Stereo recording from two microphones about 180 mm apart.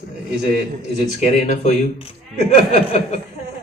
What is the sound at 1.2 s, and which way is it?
Speech, 40° left (ahead or behind).